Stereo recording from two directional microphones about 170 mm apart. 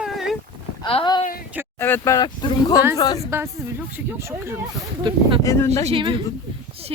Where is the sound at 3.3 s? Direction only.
15° right (ahead or behind).